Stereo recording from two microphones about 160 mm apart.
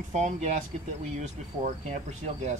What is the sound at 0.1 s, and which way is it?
Speech, 45° right (ahead or behind).